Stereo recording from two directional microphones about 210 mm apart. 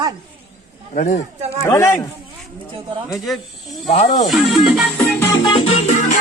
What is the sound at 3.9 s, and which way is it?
Speech, 35° left (ahead or behind).